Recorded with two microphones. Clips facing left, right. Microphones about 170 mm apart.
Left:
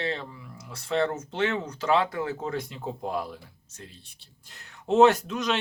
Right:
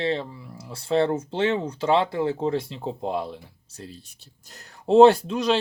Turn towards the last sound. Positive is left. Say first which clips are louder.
# right 5 dB
turn(degrees=-30)  # may be behind; listen again after turning